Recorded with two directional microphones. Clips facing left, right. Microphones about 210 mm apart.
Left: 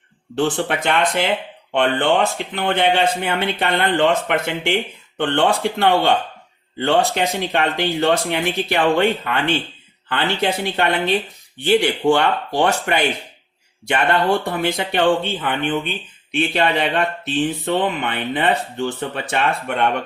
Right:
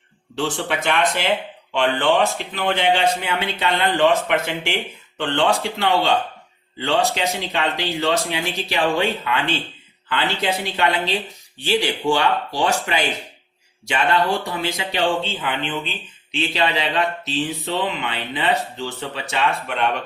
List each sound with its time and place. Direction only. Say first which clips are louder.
0.5 s speech: left 2 dB; 55° left (ahead or behind)